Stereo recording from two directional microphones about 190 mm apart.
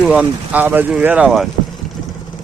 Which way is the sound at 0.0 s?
5° right (ahead or behind).